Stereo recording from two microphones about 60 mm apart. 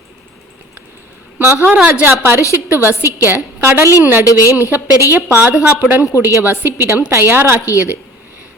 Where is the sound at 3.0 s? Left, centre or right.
Left.